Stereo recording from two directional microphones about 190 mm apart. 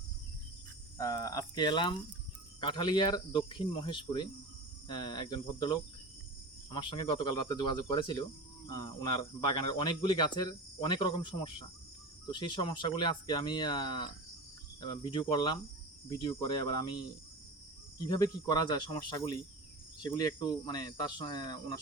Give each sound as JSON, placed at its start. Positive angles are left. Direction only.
{"t": 0.9, "sound": "speech", "side_deg": 20}
{"t": 18.0, "sound": "speech", "side_deg": 20}
{"t": 20.0, "sound": "speech", "side_deg": 20}